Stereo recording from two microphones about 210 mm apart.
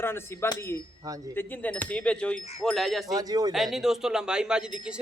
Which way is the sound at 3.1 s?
20° right (ahead or behind).